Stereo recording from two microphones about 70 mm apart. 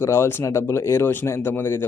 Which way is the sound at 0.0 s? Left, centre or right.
Left.